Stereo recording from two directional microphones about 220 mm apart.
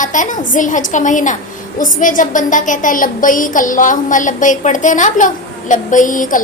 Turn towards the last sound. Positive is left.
turn(degrees=35)  # may be behind; listen again after turning